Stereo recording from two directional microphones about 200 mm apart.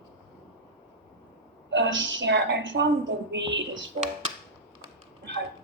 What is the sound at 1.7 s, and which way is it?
Speech, 65° right (ahead or behind).